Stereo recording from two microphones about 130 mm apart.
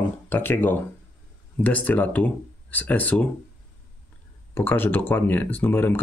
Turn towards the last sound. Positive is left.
turn(degrees=15)  # may be behind; listen again after turning